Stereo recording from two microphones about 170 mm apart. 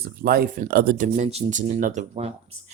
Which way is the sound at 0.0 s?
60° right (ahead or behind).